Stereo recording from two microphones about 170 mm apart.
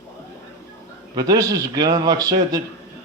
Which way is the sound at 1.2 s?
20° right (ahead or behind).